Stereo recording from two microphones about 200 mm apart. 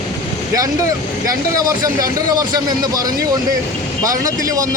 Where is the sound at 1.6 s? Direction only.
20° right (ahead or behind).